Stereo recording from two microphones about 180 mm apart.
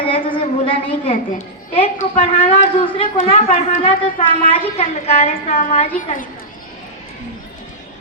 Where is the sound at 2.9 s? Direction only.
35° left (ahead or behind).